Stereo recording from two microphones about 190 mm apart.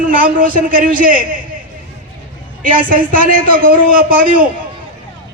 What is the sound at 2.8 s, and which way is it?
Speech, 45° right (ahead or behind).